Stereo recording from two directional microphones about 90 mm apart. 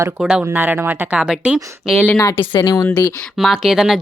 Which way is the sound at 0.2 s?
10° right (ahead or behind).